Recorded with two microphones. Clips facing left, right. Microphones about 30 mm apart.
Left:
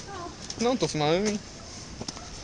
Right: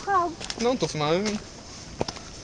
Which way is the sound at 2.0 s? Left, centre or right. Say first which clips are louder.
Right 10 dB; right.